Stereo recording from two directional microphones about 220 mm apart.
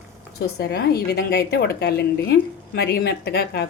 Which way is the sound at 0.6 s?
45° left (ahead or behind).